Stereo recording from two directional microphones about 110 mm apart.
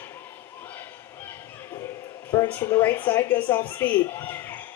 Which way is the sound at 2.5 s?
20° left (ahead or behind).